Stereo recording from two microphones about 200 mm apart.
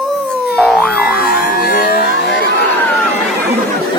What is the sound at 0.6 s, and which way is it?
Boing, 5° left (ahead or behind).